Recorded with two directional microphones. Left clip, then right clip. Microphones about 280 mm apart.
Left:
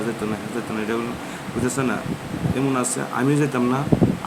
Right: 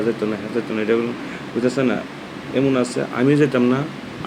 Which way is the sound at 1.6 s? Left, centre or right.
Centre.